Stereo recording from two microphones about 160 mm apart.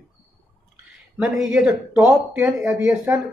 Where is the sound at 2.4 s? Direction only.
20° right (ahead or behind).